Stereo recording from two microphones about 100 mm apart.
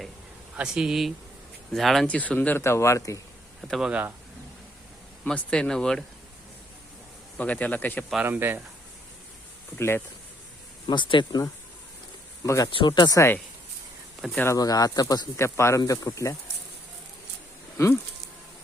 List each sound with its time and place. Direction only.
0.5 s speech: 10° right (ahead or behind)
2.0 s speech: 15° left (ahead or behind)
2.6 s speech: 25° left (ahead or behind)
3.6 s speech: centre (ahead or behind)
5.2 s speech: 10° left (ahead or behind)
7.3 s speech: 15° left (ahead or behind)
8.2 s speech: 20° right (ahead or behind)
9.7 s speech: 25° left (ahead or behind)
10.8 s speech: 50° left (ahead or behind); by 12.7 s 35° left (ahead or behind)
12.7 s speech: 50° left (ahead or behind)
13.1 s speech: 25° left (ahead or behind)
14.5 s speech: 40° left (ahead or behind)
15.4 s speech: 25° left (ahead or behind)
15.8 s speech: 40° left (ahead or behind)